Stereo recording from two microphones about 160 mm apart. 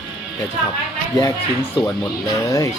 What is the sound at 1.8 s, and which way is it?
Speech, 30° left (ahead or behind).